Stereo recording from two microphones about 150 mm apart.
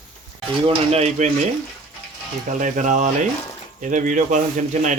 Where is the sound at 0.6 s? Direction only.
45° right (ahead or behind).